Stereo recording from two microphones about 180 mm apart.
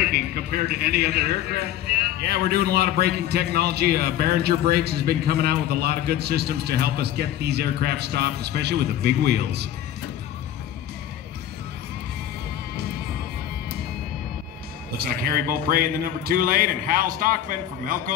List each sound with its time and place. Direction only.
0.0 s a man's voice: 60° right (ahead or behind)
15.0 s a man's voice: 55° right (ahead or behind)